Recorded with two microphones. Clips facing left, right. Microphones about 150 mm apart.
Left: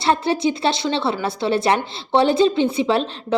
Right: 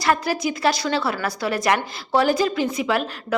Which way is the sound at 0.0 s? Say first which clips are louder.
Left 3 dB; 25° left (ahead or behind).